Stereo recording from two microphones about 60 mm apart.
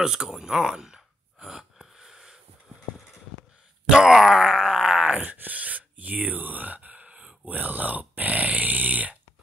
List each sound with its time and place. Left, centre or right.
0.0 s sigh: centre
3.9 s groan: centre; by 9.1 s right